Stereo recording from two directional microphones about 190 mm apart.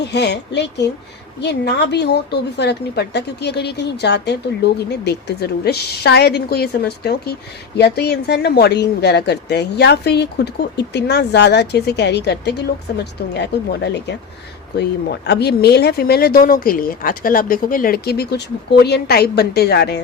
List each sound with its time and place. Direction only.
0.0 s speech: 60° left (ahead or behind)